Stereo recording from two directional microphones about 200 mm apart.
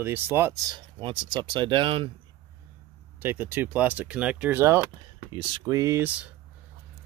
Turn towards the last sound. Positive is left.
turn(degrees=-10)  # may be behind; listen again after turning